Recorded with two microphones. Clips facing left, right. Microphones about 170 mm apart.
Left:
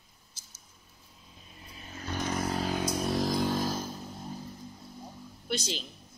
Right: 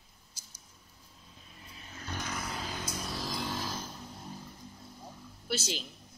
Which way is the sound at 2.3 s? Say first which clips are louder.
Left 11 dB; 35° left (ahead or behind).